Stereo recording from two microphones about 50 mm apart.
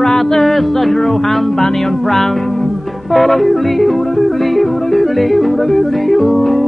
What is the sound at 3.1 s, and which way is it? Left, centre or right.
Yodeling, centre.